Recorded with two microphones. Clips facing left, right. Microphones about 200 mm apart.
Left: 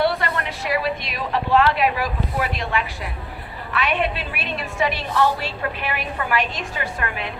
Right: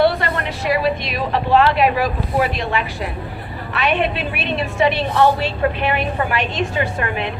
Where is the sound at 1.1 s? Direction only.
25° right (ahead or behind).